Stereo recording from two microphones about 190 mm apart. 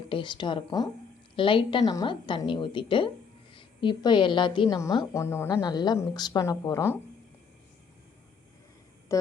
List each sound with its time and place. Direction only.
0.1 s a woman's voice: 25° left (ahead or behind)